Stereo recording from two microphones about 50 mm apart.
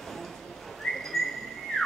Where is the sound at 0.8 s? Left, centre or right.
Centre.